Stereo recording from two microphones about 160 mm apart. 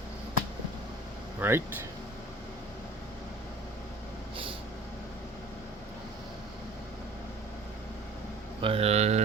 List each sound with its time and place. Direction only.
1.4 s speech: 15° right (ahead or behind)
8.6 s speech: 35° right (ahead or behind)